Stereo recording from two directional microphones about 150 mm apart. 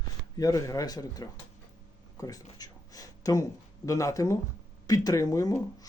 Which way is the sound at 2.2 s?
25° left (ahead or behind).